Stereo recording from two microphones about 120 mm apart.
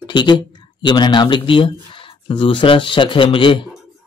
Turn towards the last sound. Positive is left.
turn(degrees=45)  # may be behind; listen again after turning